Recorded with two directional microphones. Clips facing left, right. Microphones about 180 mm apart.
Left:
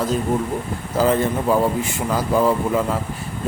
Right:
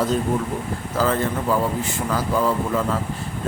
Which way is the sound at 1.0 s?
15° left (ahead or behind).